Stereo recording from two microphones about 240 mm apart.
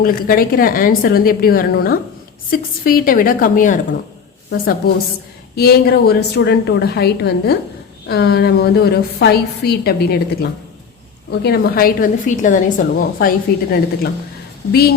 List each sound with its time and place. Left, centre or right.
0.0 s a woman's voice: left
5.5 s a woman's voice: left